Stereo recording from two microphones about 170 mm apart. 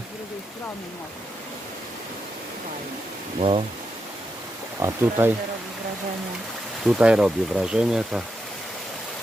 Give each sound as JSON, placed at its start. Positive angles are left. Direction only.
{"t": 4.8, "sound": "speech", "side_deg": -15}
{"t": 6.8, "sound": "speech", "side_deg": -5}